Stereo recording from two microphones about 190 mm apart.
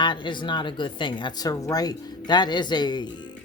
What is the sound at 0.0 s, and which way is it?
Speech, 25° left (ahead or behind).